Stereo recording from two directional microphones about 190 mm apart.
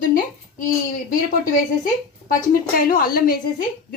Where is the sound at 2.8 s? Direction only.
50° left (ahead or behind).